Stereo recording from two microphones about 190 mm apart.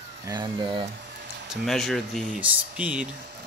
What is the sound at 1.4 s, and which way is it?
Speech, centre (ahead or behind).